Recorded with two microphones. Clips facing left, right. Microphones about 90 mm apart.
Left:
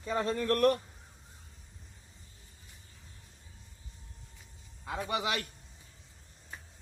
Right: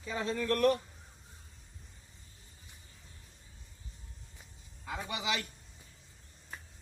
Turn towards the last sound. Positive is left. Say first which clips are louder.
# left 3 dB
turn(degrees=45)  # may be behind; listen again after turning